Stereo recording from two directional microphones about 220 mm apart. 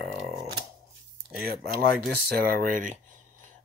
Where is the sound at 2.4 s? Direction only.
40° right (ahead or behind).